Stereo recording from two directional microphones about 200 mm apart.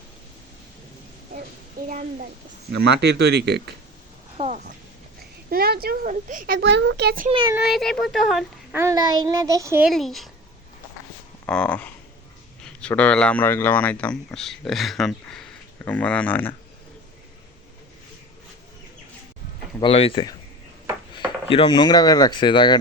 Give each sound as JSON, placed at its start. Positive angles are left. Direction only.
{"t": 2.6, "sound": "speech", "side_deg": -55}
{"t": 4.4, "sound": "speech", "side_deg": -35}
{"t": 5.5, "sound": "speech", "side_deg": -50}
{"t": 7.5, "sound": "speech", "side_deg": 0}
{"t": 8.7, "sound": "a child's voice", "side_deg": -15}
{"t": 9.9, "sound": "speech", "side_deg": 0}
{"t": 11.4, "sound": "speech", "side_deg": 5}
{"t": 19.8, "sound": "speech", "side_deg": 30}
{"t": 21.5, "sound": "speech", "side_deg": 25}